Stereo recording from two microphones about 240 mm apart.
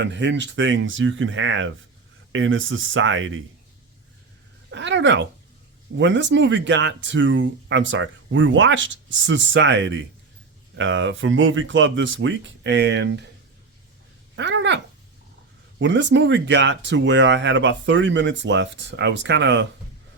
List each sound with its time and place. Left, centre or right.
0.0 s speech: right
4.7 s speech: right
14.3 s a sound: right
15.8 s speech: right